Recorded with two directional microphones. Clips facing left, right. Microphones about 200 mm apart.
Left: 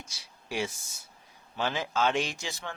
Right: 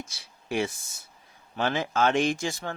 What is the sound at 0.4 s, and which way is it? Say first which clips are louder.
Speech: right 5 dB; 55° right (ahead or behind).